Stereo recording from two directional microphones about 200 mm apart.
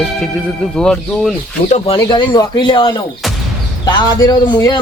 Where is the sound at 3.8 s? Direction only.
20° left (ahead or behind).